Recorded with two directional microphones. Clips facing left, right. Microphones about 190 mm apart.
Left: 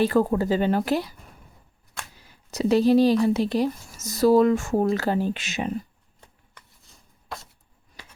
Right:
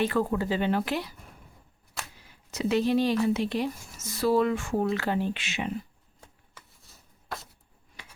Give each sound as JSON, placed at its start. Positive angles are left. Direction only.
{"t": 0.0, "sound": "a woman's voice", "side_deg": 40}
{"t": 2.2, "sound": "a woman's voice", "side_deg": 35}
{"t": 7.3, "sound": "a sound", "side_deg": 0}